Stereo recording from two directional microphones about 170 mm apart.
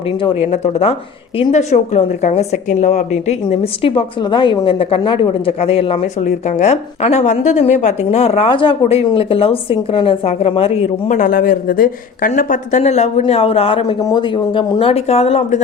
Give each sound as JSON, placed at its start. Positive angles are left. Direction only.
{"t": 0.5, "sound": "a woman's voice", "side_deg": 40}
{"t": 11.2, "sound": "speech", "side_deg": 55}
{"t": 14.0, "sound": "a woman's voice", "side_deg": 25}